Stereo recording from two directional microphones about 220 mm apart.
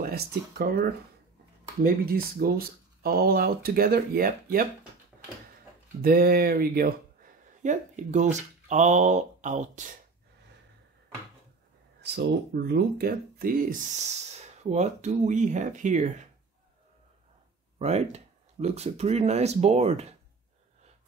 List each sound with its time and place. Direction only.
0.0 s speech: 45° right (ahead or behind)
6.0 s speech: 45° right (ahead or behind)
12.0 s speech: 50° right (ahead or behind)
17.7 s speech: 30° right (ahead or behind)